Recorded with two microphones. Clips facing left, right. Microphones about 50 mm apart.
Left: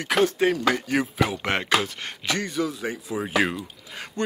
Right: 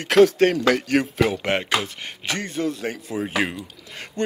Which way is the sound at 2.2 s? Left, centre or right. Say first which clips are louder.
Even; right.